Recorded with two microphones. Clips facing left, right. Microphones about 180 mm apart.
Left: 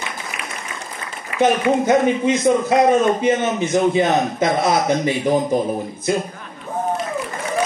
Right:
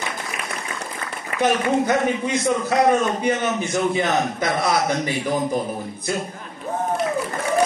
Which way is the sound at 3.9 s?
25° left (ahead or behind).